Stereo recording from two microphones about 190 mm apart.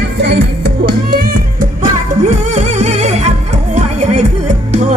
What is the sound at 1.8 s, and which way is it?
Music, 40° right (ahead or behind).